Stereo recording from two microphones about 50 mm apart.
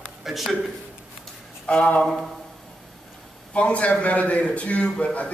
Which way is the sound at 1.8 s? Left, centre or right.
Left.